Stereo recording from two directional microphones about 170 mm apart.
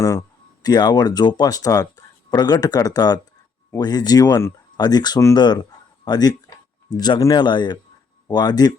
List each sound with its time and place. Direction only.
0.6 s speech: 25° left (ahead or behind)